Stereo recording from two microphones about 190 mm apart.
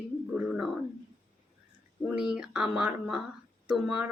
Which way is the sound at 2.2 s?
5° right (ahead or behind).